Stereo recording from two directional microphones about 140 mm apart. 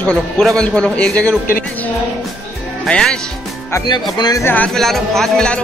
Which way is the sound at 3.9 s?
30° left (ahead or behind).